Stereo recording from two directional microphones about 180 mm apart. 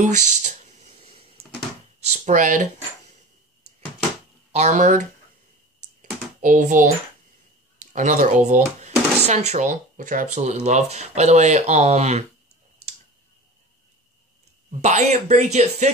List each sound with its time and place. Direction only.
0.0 s music: 45° right (ahead or behind)
2.0 s speech: 40° right (ahead or behind)
4.5 s speech: 40° right (ahead or behind)
6.4 s speech: 45° right (ahead or behind)
12.8 s tick: 35° right (ahead or behind)
14.7 s speech: 40° right (ahead or behind)